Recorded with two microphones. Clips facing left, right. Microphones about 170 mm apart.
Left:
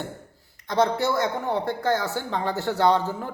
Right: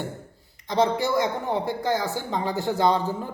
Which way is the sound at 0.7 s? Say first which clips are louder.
Even; 20° right (ahead or behind).